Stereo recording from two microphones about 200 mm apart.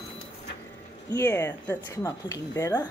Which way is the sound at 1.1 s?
10° left (ahead or behind).